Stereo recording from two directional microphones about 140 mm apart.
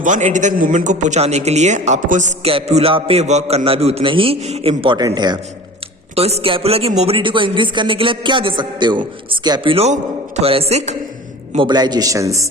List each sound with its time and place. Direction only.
0.0 s a man's voice: 60° right (ahead or behind)
2.4 s a man's voice: 45° right (ahead or behind)
6.1 s speech: 45° right (ahead or behind)
9.7 s a man's voice: 50° right (ahead or behind)
11.5 s a man's voice: 35° right (ahead or behind)